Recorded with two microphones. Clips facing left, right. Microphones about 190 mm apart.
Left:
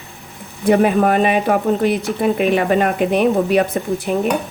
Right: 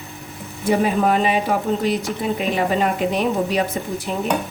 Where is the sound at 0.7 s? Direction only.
60° left (ahead or behind).